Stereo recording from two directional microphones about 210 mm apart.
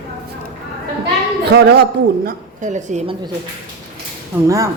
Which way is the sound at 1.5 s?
50° right (ahead or behind).